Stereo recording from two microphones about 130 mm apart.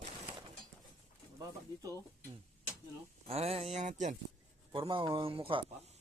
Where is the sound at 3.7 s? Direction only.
65° right (ahead or behind).